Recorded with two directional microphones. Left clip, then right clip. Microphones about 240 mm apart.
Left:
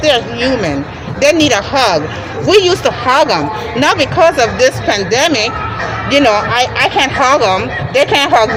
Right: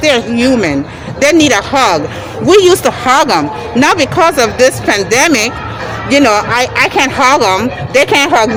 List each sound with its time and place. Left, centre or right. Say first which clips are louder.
0.0 s a woman's voice: right 1 dB; right